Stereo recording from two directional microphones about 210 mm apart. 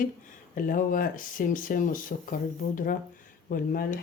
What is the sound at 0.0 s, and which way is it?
Speech, 40° left (ahead or behind).